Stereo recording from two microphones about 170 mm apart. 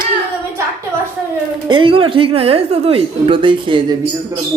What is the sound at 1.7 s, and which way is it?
A woman's voice, 30° right (ahead or behind).